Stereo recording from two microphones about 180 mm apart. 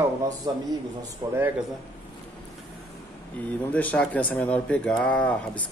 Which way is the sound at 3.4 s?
5° left (ahead or behind).